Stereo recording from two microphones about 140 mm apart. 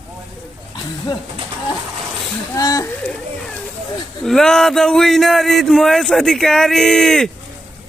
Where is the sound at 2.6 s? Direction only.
25° left (ahead or behind).